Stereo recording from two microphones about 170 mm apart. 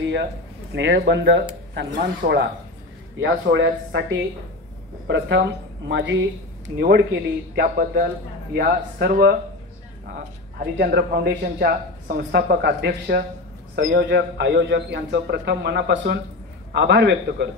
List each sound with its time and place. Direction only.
0.0 s a sound: 90° right
0.7 s speech: 90° right
1.7 s speech: 80° right
3.2 s speech: 90° right
7.5 s speech: 65° right (ahead or behind)
10.6 s a man's voice: 70° right (ahead or behind)
16.7 s a man's voice: 90° right